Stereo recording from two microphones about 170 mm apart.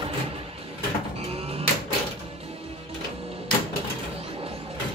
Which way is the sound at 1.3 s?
35° right (ahead or behind).